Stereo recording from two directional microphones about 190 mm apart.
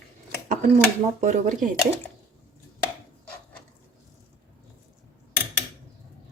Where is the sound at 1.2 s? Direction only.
40° right (ahead or behind).